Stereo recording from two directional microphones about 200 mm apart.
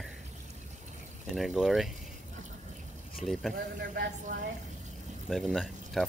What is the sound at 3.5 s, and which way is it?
Speech, 45° right (ahead or behind).